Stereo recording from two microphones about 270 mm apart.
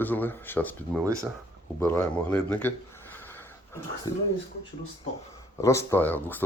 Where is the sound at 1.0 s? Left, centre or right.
Centre.